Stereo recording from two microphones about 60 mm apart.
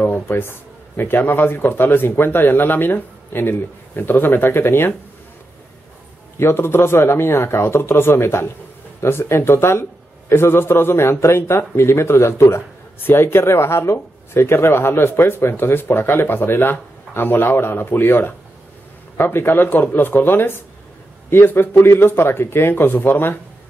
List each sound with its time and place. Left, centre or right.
0.0 s speech: left
6.3 s speech: left